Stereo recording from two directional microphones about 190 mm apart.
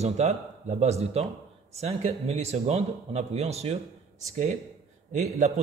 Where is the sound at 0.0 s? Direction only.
35° right (ahead or behind).